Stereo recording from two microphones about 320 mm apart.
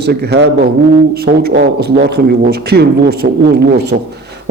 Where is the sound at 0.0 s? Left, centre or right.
Right.